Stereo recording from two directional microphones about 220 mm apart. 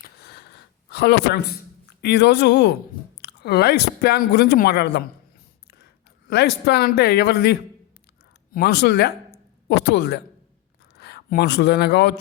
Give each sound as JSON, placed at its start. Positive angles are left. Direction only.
{"t": 0.0, "sound": "a sound", "side_deg": 45}
{"t": 3.2, "sound": "speech", "side_deg": 50}
{"t": 6.3, "sound": "a man's voice", "side_deg": 50}